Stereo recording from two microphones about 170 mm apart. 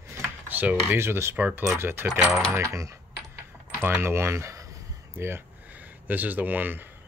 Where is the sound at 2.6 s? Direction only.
20° right (ahead or behind).